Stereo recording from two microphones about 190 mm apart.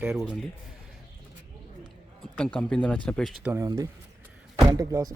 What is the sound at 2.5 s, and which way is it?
Speech, 5° left (ahead or behind).